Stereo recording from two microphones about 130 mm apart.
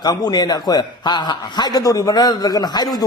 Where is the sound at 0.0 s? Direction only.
30° left (ahead or behind).